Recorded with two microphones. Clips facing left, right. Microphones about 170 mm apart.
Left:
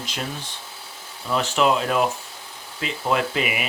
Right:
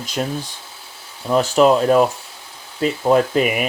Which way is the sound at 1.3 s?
40° right (ahead or behind).